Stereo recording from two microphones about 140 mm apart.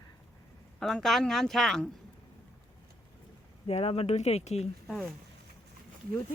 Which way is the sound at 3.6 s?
45° left (ahead or behind).